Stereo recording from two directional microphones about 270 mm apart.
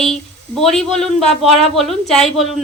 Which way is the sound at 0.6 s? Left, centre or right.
Centre.